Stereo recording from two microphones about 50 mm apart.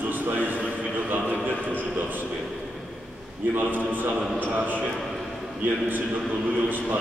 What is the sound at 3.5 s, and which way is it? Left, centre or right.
A man's voice, right.